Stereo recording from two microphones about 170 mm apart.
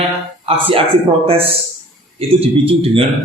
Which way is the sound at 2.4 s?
35° right (ahead or behind).